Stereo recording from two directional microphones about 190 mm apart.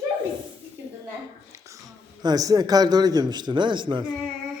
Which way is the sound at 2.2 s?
20° right (ahead or behind).